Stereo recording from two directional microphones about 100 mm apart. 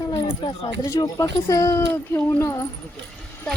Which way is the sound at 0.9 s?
35° left (ahead or behind).